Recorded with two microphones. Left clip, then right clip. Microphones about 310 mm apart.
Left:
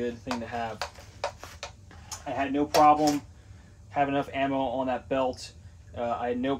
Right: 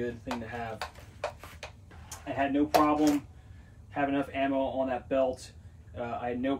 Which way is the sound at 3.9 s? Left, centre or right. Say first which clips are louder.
Left 3 dB; centre.